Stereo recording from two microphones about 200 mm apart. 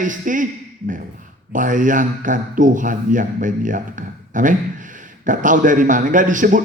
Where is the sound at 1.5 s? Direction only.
40° right (ahead or behind).